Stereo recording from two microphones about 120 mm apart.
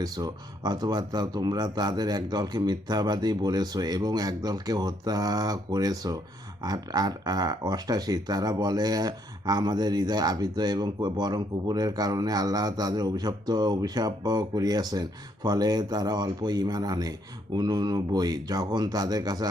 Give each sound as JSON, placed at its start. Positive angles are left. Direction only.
{"t": 0.0, "sound": "speech", "side_deg": -35}